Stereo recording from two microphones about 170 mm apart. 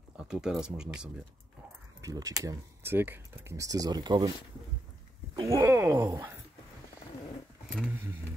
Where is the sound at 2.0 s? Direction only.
20° right (ahead or behind).